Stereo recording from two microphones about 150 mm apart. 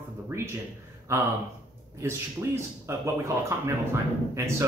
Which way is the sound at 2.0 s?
15° right (ahead or behind).